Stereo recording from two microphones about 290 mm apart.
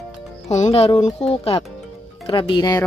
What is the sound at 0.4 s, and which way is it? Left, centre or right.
Speech, left.